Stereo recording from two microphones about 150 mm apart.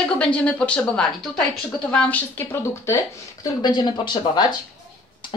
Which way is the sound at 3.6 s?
30° left (ahead or behind).